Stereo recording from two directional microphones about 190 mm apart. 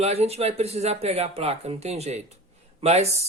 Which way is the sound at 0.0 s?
35° right (ahead or behind).